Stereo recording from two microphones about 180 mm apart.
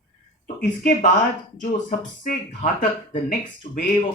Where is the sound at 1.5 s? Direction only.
45° left (ahead or behind).